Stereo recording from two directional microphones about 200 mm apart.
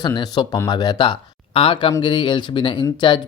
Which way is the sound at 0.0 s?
20° left (ahead or behind).